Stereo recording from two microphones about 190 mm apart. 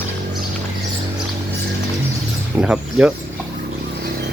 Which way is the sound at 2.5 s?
5° right (ahead or behind).